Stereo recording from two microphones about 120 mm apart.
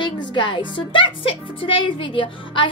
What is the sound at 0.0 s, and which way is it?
A woman's voice, 40° left (ahead or behind).